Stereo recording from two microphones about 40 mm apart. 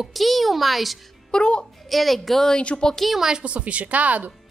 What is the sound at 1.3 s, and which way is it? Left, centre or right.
Speech, left.